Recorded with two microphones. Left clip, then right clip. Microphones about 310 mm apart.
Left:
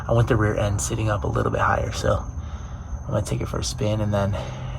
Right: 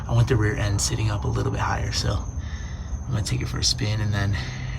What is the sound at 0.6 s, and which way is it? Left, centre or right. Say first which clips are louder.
Speech: left 2 dB; centre.